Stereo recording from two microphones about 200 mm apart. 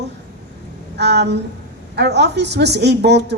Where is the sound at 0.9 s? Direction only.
60° right (ahead or behind).